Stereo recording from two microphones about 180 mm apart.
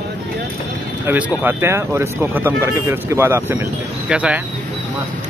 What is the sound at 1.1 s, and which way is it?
Speech, 10° right (ahead or behind).